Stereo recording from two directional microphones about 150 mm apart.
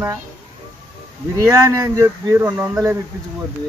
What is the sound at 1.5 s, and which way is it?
Speech, 20° right (ahead or behind).